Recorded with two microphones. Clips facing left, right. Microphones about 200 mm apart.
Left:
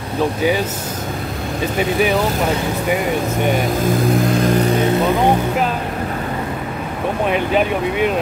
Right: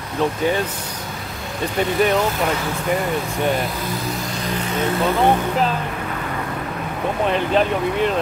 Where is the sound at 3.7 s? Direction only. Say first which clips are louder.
Left 10 dB; 50° left (ahead or behind).